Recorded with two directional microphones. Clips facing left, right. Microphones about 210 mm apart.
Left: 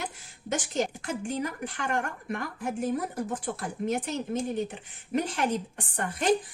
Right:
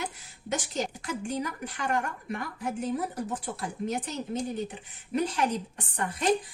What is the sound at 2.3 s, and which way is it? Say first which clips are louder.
Speech: left 1 dB; 50° left (ahead or behind).